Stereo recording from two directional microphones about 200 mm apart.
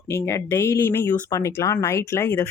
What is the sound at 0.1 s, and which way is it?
Speech, 15° left (ahead or behind).